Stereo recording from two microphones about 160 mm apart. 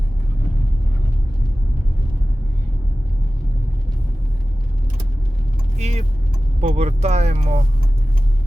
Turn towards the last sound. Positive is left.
turn(degrees=-45)  # may be behind; listen again after turning